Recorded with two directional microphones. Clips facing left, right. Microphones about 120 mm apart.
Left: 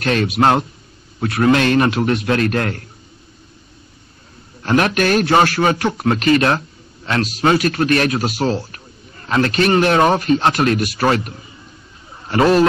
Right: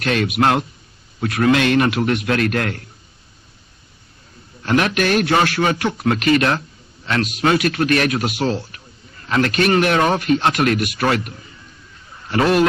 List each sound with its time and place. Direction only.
0.0 s speech: 35° left (ahead or behind)
4.6 s speech: 40° left (ahead or behind)